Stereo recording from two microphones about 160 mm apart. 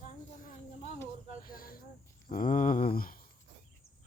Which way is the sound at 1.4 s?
65° left (ahead or behind).